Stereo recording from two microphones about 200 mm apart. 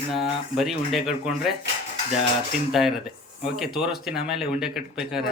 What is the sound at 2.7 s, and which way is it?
Speech, centre (ahead or behind).